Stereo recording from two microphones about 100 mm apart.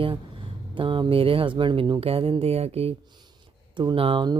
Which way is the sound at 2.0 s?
70° right (ahead or behind).